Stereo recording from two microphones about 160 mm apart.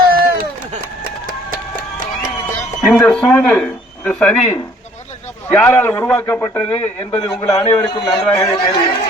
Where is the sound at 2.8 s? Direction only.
5° left (ahead or behind); by 8.0 s 20° left (ahead or behind).